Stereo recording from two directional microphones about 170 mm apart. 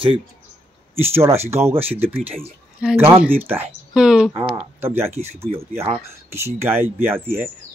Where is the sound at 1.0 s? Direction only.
15° right (ahead or behind).